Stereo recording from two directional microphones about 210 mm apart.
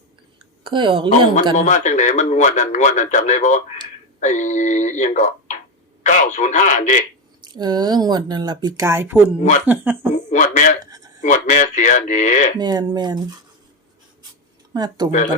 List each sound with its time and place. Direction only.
0.6 s speech: 25° right (ahead or behind)
1.5 s speech: 35° left (ahead or behind)
7.4 s speech: 20° right (ahead or behind)
10.2 s speech: 35° left (ahead or behind)
12.5 s speech: 20° right (ahead or behind)
14.7 s speech: 20° right (ahead or behind)